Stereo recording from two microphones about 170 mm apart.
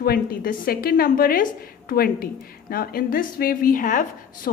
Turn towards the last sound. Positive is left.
turn(degrees=60)  # may be behind; listen again after turning